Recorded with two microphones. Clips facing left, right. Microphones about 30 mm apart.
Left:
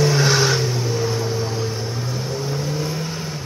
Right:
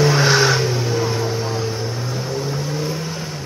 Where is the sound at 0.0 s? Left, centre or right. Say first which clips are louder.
Right 2 dB; centre.